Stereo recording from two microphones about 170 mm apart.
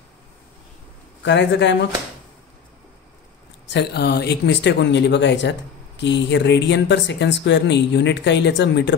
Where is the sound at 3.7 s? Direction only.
80° left.